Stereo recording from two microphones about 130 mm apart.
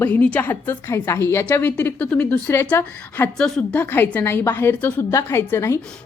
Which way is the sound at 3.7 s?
15° left (ahead or behind).